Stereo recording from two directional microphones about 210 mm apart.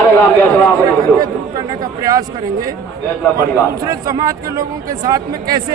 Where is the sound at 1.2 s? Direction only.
20° right (ahead or behind).